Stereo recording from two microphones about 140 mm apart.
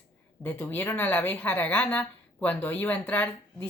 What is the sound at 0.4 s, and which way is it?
A woman's voice, 15° left (ahead or behind).